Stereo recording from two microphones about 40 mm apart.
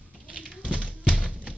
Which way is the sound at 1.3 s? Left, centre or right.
Right.